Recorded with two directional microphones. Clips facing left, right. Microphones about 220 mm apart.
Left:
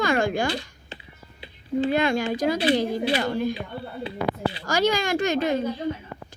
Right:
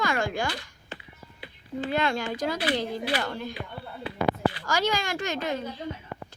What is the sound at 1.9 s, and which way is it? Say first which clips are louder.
A woman's voice: left 5 dB; 15° left (ahead or behind).